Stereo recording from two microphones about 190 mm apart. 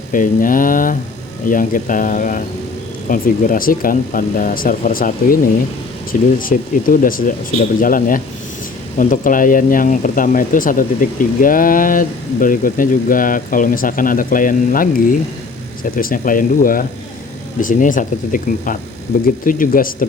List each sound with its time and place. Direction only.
0.1 s speech: 45° left (ahead or behind)